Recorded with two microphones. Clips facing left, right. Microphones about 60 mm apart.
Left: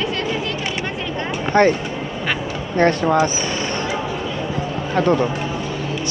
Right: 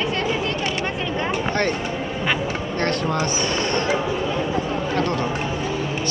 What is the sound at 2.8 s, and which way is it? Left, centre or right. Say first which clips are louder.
Speech: left 8 dB; centre.